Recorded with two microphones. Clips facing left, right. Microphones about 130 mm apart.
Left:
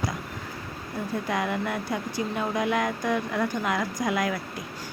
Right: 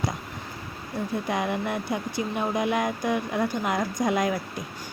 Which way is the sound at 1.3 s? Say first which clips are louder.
Even; 20° right (ahead or behind).